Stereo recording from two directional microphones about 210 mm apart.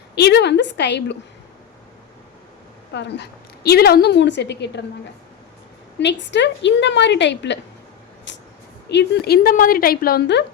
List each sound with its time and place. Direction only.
0.2 s a woman's voice: 50° left (ahead or behind)
2.9 s a woman's voice: 55° left (ahead or behind)
6.0 s a woman's voice: 55° left (ahead or behind)
8.3 s a sound: 55° left (ahead or behind)
8.9 s a woman's voice: 55° left (ahead or behind)